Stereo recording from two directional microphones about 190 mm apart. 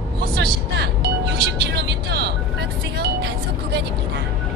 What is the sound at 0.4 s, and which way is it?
Music, 60° right (ahead or behind).